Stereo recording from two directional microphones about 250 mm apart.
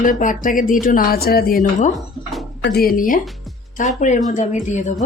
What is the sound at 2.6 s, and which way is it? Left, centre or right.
Speech, left.